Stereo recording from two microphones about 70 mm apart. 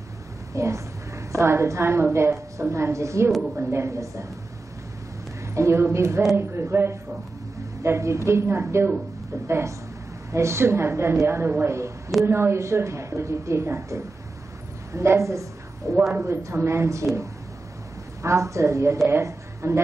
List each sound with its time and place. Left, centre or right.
0.5 s a woman's voice: right
3.3 s a woman's voice: centre
3.5 s a woman's voice: right
5.5 s a woman's voice: right
16.3 s a woman's voice: right